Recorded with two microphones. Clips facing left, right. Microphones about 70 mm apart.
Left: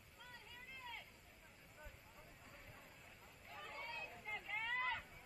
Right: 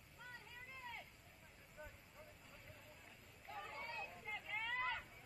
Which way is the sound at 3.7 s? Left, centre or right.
Right.